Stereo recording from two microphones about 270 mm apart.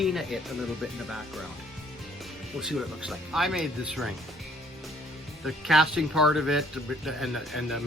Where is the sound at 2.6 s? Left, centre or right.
Centre.